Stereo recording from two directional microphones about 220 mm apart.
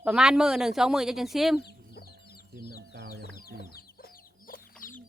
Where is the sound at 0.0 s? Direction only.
5° right (ahead or behind).